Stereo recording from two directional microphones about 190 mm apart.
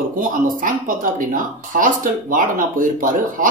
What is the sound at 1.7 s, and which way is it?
Speech, 45° right (ahead or behind).